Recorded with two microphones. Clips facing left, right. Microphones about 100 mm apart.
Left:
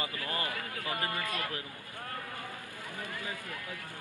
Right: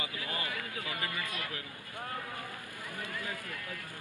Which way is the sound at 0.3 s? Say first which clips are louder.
Left 2 dB; 40° left (ahead or behind).